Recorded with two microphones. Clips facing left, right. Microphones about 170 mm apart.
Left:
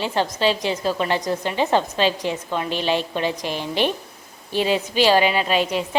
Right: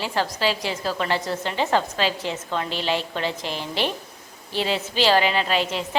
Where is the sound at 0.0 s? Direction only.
20° left (ahead or behind).